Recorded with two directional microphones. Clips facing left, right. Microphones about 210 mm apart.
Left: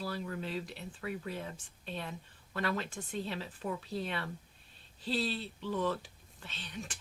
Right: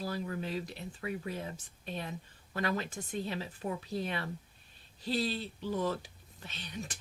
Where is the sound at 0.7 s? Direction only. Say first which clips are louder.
Right 1 dB; 15° right (ahead or behind).